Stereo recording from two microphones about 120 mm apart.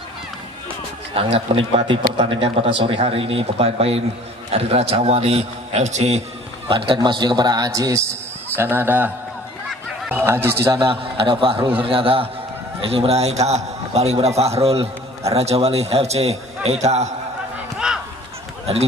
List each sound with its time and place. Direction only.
1.1 s a man's voice: 50° right (ahead or behind); by 6.2 s 70° right (ahead or behind)
6.7 s a man's voice: 45° right (ahead or behind); by 8.0 s 30° right (ahead or behind)
8.5 s a man's voice: 15° right (ahead or behind)
11.1 s a man's voice: 45° right (ahead or behind); by 17.1 s 70° right (ahead or behind)
17.7 s honk: 5° right (ahead or behind)